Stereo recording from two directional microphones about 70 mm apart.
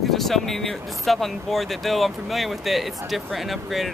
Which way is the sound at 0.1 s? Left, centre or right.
Centre.